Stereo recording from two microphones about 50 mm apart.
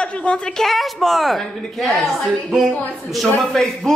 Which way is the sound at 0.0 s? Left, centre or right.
Left.